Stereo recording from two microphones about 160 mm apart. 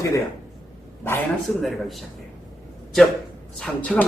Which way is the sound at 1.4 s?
Centre (ahead or behind).